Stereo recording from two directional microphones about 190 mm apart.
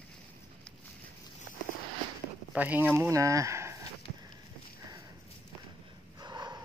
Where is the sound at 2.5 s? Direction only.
10° right (ahead or behind).